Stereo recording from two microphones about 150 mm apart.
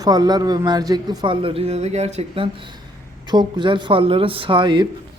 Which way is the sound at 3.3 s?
30° right (ahead or behind).